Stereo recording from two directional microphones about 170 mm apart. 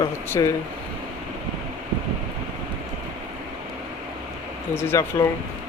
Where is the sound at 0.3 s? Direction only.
15° left (ahead or behind).